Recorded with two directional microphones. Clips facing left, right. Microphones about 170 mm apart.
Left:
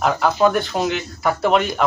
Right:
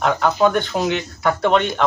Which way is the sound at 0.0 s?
5° left (ahead or behind).